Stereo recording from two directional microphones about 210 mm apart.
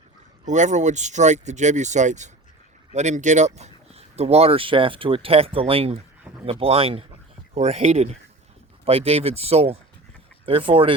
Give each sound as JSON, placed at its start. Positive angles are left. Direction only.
{"t": 0.4, "sound": "speech", "side_deg": -35}